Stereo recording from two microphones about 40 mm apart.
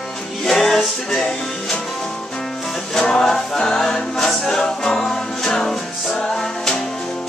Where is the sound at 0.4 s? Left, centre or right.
Centre.